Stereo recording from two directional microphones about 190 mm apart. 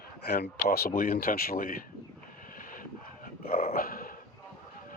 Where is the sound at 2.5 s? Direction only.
45° left (ahead or behind).